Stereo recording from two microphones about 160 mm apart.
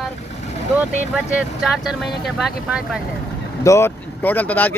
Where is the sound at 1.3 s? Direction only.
5° right (ahead or behind).